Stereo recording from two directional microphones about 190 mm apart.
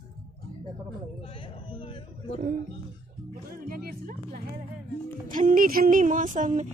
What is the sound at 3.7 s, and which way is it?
Music, 50° right (ahead or behind).